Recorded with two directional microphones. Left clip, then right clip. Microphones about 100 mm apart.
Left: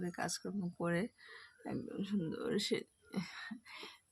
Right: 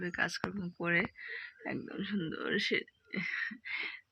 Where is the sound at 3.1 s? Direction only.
40° left (ahead or behind).